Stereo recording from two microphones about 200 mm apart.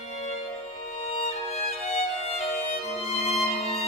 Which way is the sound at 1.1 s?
30° left (ahead or behind).